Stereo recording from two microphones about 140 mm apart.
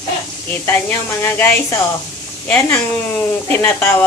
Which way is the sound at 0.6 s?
15° left (ahead or behind).